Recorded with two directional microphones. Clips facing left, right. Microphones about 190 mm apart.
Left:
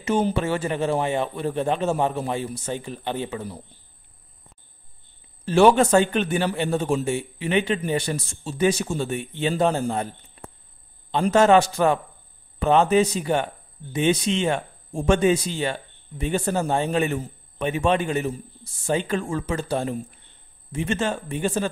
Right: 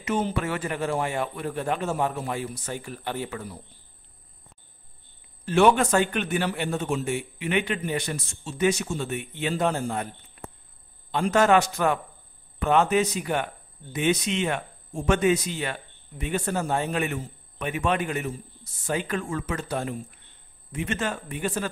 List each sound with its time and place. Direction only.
0.0 s speech: 30° left (ahead or behind)
5.4 s speech: 30° left (ahead or behind)